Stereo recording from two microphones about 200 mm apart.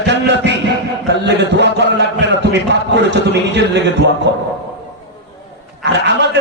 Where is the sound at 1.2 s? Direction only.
60° right (ahead or behind).